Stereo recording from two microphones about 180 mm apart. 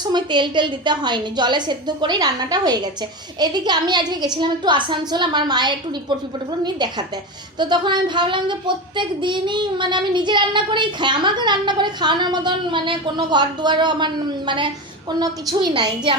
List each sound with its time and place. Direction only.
0.0 s speech: 25° right (ahead or behind)